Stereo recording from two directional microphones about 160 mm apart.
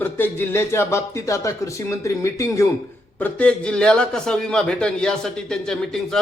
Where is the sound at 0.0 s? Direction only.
15° left (ahead or behind).